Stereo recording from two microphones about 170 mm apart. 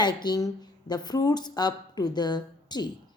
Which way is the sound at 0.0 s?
25° left (ahead or behind).